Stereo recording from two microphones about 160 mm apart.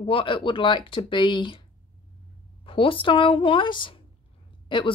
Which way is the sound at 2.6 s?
35° left (ahead or behind).